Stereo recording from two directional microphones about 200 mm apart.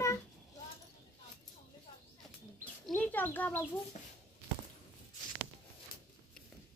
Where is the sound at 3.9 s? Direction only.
35° left (ahead or behind).